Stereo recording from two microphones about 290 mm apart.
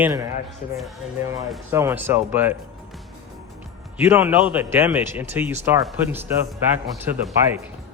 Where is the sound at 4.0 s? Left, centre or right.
Centre.